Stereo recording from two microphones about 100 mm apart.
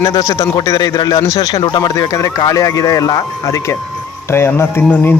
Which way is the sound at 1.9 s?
35° left (ahead or behind).